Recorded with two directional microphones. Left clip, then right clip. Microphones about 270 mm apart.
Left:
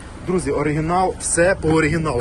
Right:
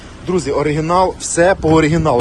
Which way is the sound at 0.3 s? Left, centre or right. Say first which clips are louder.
Right 4 dB; centre.